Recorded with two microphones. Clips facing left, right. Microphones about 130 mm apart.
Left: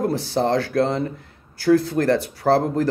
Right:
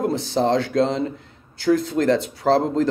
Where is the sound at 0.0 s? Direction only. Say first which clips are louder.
Even; 20° right (ahead or behind).